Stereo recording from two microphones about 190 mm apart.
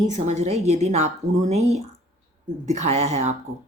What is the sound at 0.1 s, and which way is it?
A woman's voice, 35° right (ahead or behind).